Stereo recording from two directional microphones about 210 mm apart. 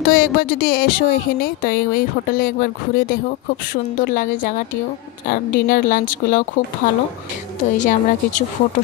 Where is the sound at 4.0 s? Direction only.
45° left (ahead or behind).